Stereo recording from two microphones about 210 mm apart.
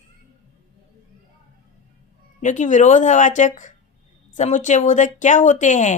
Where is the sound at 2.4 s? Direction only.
35° left (ahead or behind).